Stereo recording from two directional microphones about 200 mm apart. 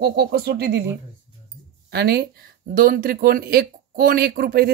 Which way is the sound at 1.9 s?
55° right (ahead or behind).